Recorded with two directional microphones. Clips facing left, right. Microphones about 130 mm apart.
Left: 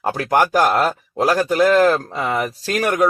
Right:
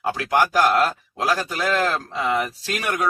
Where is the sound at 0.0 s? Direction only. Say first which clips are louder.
Left 3 dB; 45° left (ahead or behind).